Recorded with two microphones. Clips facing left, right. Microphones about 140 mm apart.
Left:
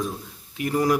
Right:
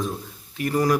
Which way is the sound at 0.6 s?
15° left (ahead or behind).